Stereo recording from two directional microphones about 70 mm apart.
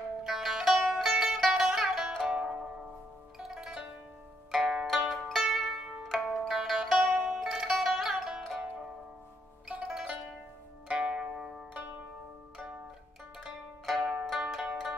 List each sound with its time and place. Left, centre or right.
0.2 s music: centre
3.3 s zither: centre
5.4 s music: centre
6.0 s zither: centre
7.1 s music: centre
9.7 s music: centre
10.9 s zither: centre
13.8 s zither: centre